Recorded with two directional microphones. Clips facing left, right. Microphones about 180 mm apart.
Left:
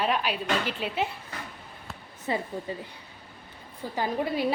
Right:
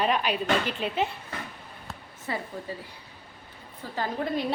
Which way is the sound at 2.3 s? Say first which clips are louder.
Left 4 dB; 20° left (ahead or behind).